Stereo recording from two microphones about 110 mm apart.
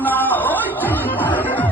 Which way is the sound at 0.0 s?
15° left (ahead or behind).